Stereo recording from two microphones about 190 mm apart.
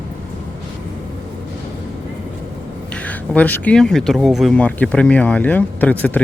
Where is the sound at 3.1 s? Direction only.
10° left (ahead or behind).